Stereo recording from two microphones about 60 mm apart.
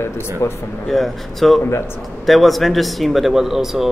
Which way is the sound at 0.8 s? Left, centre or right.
Centre.